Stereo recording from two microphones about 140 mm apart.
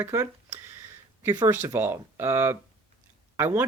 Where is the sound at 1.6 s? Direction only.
15° right (ahead or behind).